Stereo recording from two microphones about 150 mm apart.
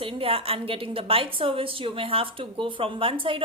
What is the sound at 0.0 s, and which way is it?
A woman's voice, 35° right (ahead or behind).